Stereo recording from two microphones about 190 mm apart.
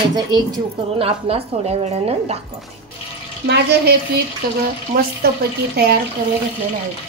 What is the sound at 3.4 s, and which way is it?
Speech, 60° right (ahead or behind).